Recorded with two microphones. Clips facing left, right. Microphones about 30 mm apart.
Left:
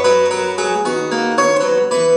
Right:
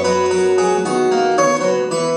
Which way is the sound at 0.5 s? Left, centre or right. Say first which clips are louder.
Right 2 dB; left.